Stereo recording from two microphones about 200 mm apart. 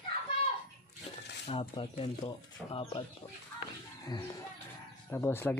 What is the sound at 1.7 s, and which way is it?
Speech, 25° left (ahead or behind).